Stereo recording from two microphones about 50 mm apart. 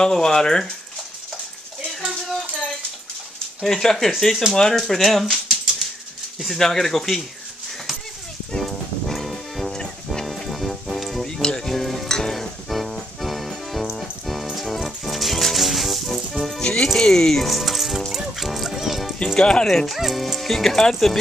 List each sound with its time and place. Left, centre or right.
0.0 s speech: centre
3.6 s speech: centre
8.5 s music: centre
11.2 s music: centre
16.6 s music: centre
19.1 s music: centre
19.9 s speech: centre